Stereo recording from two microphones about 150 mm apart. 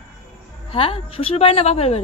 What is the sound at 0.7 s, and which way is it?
A woman's voice, 40° left (ahead or behind).